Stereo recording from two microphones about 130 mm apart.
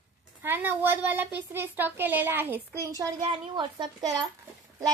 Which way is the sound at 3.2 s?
40° right (ahead or behind).